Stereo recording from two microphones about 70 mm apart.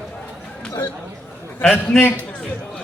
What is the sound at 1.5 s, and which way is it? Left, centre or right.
Speech, left.